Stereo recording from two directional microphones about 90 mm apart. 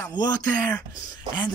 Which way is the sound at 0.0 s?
50° left (ahead or behind).